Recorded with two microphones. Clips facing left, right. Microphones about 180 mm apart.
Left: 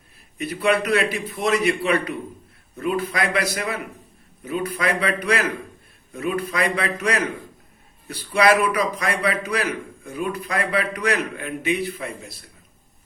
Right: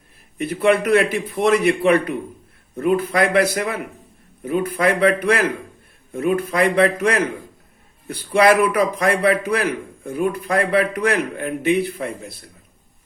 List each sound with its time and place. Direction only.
0.3 s a man's voice: 50° right (ahead or behind)